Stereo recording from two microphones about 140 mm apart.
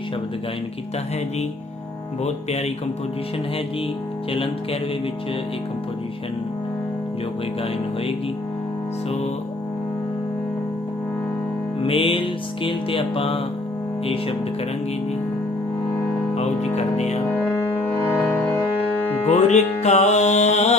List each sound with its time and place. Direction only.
2.2 s speech: 50° left (ahead or behind)
4.3 s music: 40° left (ahead or behind)
11.8 s music: 40° left (ahead or behind)
16.3 s speech: 50° left (ahead or behind)
18.3 s music: 15° left (ahead or behind)
19.2 s music: 55° left (ahead or behind)